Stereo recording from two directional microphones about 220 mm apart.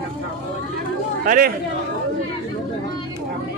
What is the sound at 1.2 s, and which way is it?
Speech, 40° right (ahead or behind).